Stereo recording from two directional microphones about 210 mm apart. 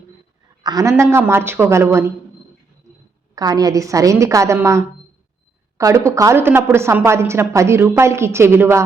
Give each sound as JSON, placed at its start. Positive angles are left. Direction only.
{"t": 0.6, "sound": "a woman's voice", "side_deg": -15}
{"t": 3.3, "sound": "a woman's voice", "side_deg": -15}